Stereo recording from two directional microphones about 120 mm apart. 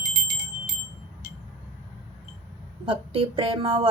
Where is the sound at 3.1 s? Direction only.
50° right (ahead or behind).